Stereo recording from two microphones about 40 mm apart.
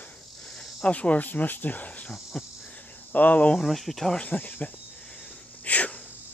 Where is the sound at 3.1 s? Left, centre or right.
Left.